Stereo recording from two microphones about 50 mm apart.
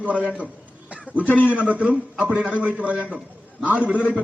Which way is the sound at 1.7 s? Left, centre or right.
Right.